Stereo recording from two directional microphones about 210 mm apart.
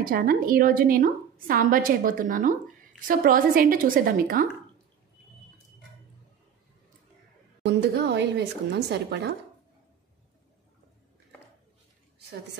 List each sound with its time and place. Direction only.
0.0 s a woman's voice: 40° right (ahead or behind)
7.6 s a woman's voice: 55° right (ahead or behind)